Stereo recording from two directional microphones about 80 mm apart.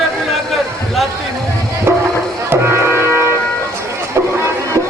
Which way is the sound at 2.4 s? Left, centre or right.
Right.